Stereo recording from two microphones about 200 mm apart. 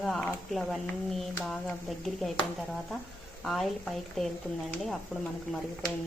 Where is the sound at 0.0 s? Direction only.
5° left (ahead or behind).